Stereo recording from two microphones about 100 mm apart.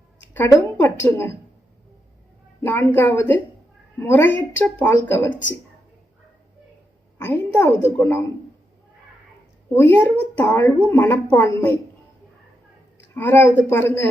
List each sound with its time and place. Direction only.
0.2 s a sound: 25° left (ahead or behind)
0.6 s a woman's voice: 20° left (ahead or behind)
2.6 s a woman's voice: 25° left (ahead or behind)
7.2 s a woman's voice: 20° left (ahead or behind)
9.7 s a woman's voice: 20° left (ahead or behind)
13.1 s a woman's voice: 20° left (ahead or behind)